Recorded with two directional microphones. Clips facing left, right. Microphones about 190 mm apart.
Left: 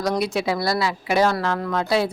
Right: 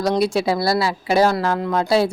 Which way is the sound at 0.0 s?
30° right (ahead or behind).